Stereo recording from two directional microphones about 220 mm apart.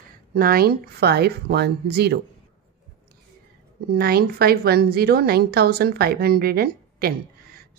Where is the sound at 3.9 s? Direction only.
45° right (ahead or behind).